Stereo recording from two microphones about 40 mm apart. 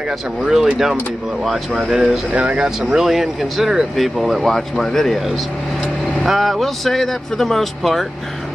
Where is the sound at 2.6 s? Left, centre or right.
Centre.